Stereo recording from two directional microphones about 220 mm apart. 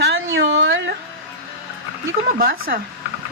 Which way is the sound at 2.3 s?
40° right (ahead or behind).